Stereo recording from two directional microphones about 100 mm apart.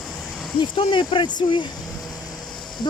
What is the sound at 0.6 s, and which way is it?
Speech, 55° left (ahead or behind).